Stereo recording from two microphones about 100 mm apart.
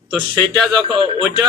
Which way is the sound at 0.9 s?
50° right (ahead or behind).